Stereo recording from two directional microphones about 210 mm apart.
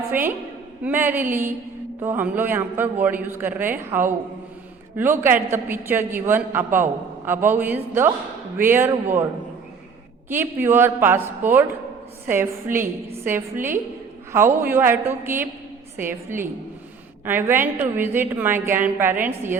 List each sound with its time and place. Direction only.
0.1 s a woman's voice: 10° right (ahead or behind)
10.2 s a woman's voice: 10° right (ahead or behind)